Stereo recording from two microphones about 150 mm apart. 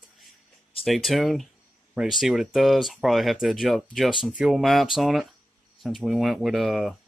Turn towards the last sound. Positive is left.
turn(degrees=0)  # may be behind; listen again after turning